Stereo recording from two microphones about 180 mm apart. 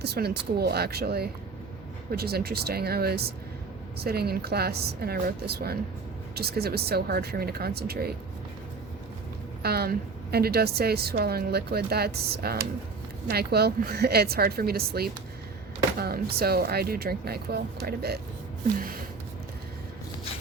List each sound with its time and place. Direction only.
0.0 s speech: 65° right (ahead or behind)
9.6 s speech: 60° right (ahead or behind)
18.8 s a sound: 55° right (ahead or behind)